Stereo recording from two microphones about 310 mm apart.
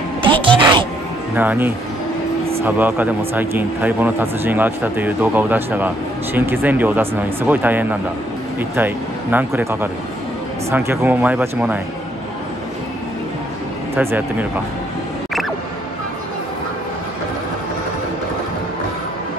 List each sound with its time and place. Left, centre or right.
0.4 s music: centre
1.3 s speech: centre
13.9 s speech: centre